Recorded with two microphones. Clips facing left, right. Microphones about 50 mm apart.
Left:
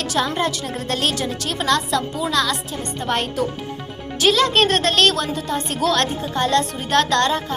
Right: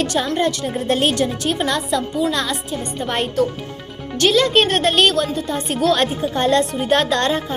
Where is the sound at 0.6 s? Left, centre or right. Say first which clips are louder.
Right 4 dB; centre.